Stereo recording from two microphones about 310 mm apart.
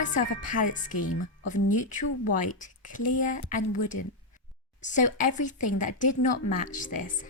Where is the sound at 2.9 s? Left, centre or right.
Left.